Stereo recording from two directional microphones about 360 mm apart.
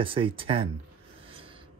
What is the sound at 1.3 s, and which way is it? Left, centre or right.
Rub, centre.